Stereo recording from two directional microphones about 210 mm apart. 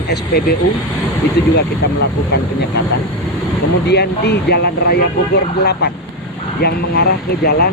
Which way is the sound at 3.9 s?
50° left (ahead or behind).